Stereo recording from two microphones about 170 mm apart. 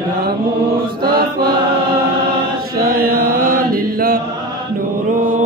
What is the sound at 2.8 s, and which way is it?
Mantra, 60° right (ahead or behind).